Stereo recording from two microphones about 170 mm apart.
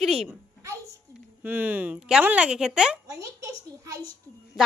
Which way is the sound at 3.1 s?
20° right (ahead or behind).